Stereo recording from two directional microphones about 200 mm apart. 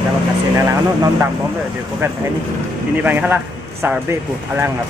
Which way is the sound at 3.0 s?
10° right (ahead or behind).